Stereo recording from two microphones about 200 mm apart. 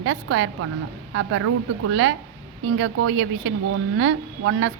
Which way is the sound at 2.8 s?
70° right (ahead or behind).